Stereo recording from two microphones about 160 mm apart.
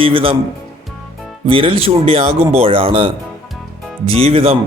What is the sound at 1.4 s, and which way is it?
Speech, 35° right (ahead or behind).